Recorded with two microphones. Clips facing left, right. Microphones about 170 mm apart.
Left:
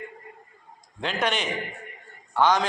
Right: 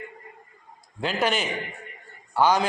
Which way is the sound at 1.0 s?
5° right (ahead or behind).